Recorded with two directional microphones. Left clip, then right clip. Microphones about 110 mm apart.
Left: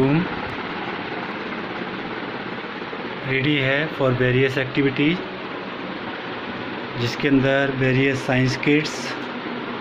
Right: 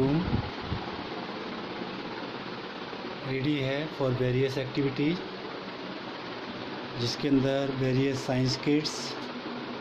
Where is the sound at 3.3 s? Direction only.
20° right (ahead or behind).